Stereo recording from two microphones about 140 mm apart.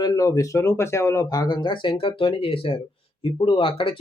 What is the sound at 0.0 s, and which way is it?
Speech, 25° left (ahead or behind).